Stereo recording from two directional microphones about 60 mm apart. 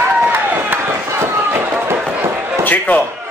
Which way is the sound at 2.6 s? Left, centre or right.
Left.